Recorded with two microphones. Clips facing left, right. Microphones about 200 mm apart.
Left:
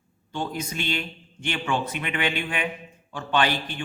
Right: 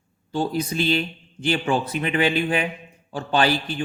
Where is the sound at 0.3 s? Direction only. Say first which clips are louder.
Right 6 dB; 35° right (ahead or behind).